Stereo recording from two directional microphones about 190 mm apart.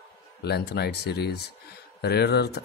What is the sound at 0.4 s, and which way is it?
Speech, 60° left (ahead or behind).